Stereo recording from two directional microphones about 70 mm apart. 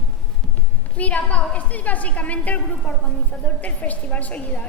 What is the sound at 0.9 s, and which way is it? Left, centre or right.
A woman's voice, centre.